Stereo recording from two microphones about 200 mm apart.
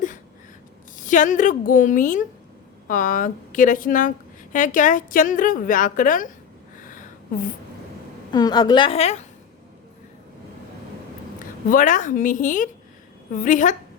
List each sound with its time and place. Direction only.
0.9 s a woman's voice: 40° left (ahead or behind)
8.3 s a woman's voice: 20° left (ahead or behind)
11.7 s a woman's voice: 40° left (ahead or behind)